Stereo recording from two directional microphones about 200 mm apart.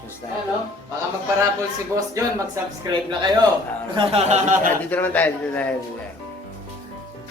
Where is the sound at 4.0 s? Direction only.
30° right (ahead or behind).